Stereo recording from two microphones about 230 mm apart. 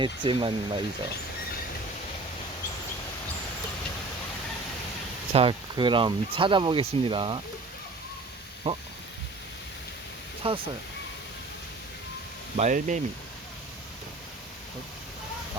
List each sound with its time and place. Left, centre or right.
0.0 s speech: right
5.3 s speech: right
8.7 s speech: right
10.4 s speech: right
12.5 s speech: right